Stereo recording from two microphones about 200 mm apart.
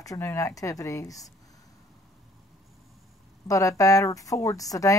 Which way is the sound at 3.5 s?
15° left (ahead or behind).